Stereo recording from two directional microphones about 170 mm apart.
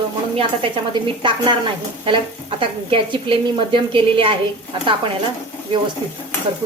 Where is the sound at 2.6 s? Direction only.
30° right (ahead or behind).